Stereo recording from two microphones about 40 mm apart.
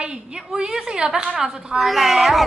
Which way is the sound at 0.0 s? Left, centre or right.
Right.